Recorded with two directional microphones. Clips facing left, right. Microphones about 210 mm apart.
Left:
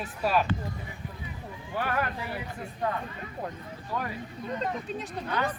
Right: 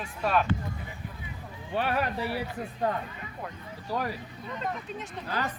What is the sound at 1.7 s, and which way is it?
Speech, 25° right (ahead or behind).